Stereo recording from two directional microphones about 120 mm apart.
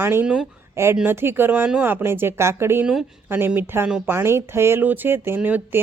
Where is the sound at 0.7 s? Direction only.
20° right (ahead or behind).